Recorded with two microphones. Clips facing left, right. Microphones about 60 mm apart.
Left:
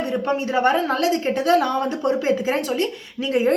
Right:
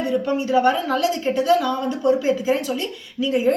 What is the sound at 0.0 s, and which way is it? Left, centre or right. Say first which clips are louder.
A woman's voice: right 1 dB; left.